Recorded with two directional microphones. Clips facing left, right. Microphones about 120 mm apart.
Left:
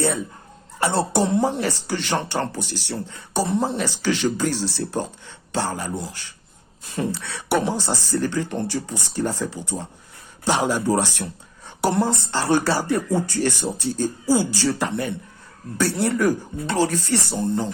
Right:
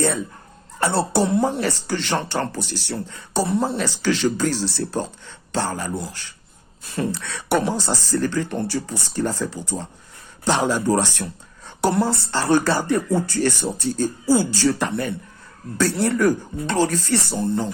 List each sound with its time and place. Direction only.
0.8 s speech: 15° left (ahead or behind)